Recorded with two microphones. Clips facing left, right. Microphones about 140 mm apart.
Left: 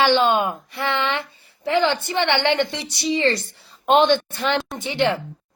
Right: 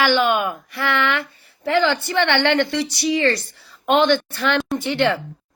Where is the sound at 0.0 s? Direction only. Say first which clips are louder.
Left 1 dB; 25° left (ahead or behind).